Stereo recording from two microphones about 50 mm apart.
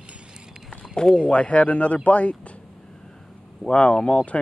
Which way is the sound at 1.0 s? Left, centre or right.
Centre.